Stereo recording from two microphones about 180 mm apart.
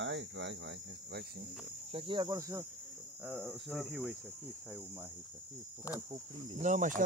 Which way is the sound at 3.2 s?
Centre (ahead or behind).